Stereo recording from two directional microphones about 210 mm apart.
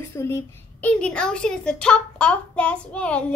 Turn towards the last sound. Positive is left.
turn(degrees=5)  # may be behind; listen again after turning